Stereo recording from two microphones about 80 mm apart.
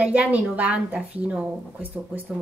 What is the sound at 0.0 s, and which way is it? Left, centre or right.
A woman's voice, centre.